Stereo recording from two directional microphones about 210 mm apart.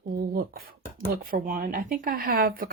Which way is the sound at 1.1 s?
40° right (ahead or behind).